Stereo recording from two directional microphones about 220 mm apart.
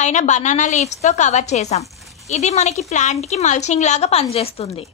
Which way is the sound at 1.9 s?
Centre (ahead or behind).